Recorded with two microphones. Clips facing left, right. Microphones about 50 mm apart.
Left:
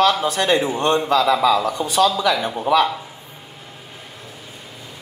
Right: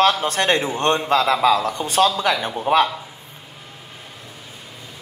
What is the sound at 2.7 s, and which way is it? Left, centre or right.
Speech, right.